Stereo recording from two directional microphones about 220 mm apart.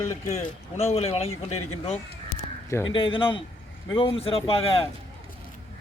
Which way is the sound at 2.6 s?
15° left (ahead or behind).